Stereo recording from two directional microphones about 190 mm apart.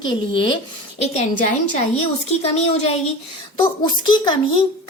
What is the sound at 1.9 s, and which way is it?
A woman's voice, 35° left (ahead or behind).